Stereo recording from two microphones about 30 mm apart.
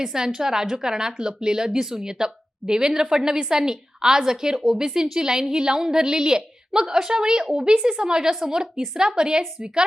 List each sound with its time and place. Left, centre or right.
0.0 s a woman's voice: centre